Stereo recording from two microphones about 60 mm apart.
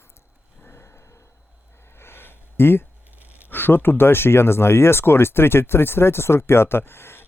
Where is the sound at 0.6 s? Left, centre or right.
Left.